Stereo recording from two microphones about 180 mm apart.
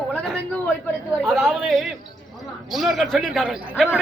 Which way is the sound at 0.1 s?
5° left (ahead or behind).